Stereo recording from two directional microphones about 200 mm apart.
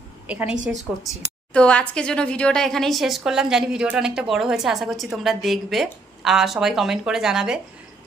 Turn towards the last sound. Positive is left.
turn(degrees=-5)  # may be behind; listen again after turning